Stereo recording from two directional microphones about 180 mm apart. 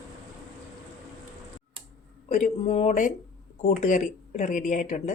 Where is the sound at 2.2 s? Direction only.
40° left (ahead or behind).